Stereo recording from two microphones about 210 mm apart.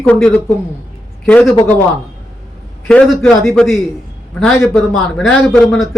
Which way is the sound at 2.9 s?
Centre (ahead or behind).